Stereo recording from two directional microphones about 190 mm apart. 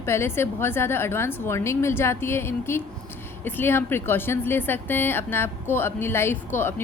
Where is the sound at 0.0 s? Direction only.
15° left (ahead or behind).